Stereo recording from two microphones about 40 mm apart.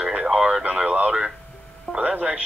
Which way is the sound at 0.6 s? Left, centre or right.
Right.